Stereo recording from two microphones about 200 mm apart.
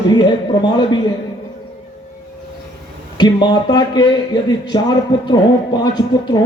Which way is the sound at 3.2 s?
20° left (ahead or behind).